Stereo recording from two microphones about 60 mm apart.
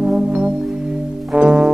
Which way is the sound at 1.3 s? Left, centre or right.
Centre.